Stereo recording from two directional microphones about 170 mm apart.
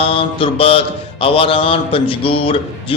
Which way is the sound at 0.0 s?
35° left (ahead or behind).